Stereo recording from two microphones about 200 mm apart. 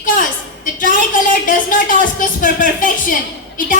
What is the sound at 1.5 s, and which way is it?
A woman's voice, 45° left (ahead or behind).